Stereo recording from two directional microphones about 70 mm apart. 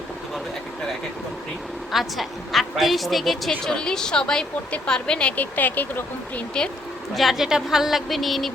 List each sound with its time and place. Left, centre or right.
1.9 s a woman's voice: centre
5.4 s speech: left
7.1 s a woman's voice: centre